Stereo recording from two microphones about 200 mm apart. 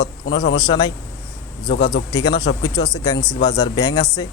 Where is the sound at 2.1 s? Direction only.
20° left (ahead or behind).